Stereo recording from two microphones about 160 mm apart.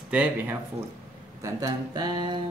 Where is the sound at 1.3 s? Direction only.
20° right (ahead or behind).